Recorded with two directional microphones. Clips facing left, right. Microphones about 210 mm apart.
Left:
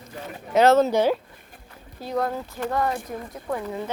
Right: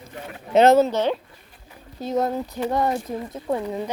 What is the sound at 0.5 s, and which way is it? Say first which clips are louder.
Speech: right 2 dB; 20° right (ahead or behind).